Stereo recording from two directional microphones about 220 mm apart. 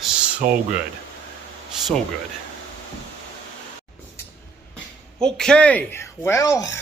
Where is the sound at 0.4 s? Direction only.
40° right (ahead or behind).